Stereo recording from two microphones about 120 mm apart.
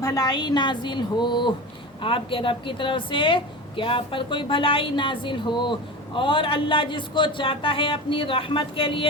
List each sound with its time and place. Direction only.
0.0 s a woman's voice: 30° left (ahead or behind); by 9.0 s 45° left (ahead or behind)